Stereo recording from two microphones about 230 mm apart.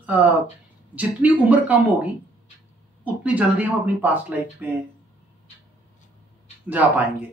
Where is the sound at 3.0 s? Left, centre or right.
Centre.